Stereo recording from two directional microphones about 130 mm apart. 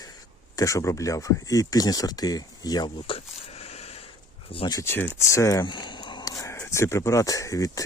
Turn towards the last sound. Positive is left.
turn(degrees=25)  # may be behind; listen again after turning